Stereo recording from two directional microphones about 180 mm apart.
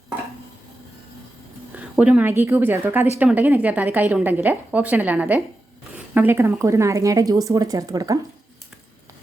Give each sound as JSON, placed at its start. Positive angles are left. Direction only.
{"t": 1.7, "sound": "a woman's voice", "side_deg": -5}